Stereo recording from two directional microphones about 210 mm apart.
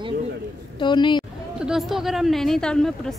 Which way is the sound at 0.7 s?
20° left (ahead or behind).